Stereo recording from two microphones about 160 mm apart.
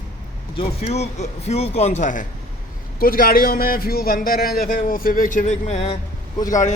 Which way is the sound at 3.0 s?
65° left (ahead or behind).